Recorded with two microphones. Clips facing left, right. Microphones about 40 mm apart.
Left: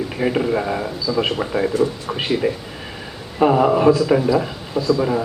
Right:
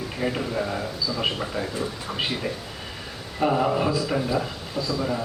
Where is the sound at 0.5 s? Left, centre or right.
Left.